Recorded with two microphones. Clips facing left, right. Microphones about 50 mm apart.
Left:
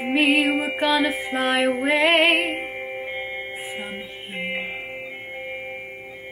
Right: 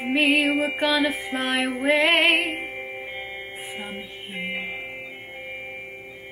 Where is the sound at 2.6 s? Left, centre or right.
Centre.